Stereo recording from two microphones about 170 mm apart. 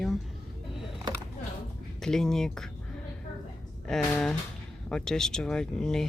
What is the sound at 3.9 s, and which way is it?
Speech, 5° left (ahead or behind).